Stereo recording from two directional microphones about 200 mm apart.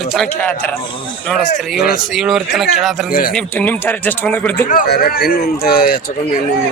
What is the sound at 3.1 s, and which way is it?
Speech, 45° left (ahead or behind).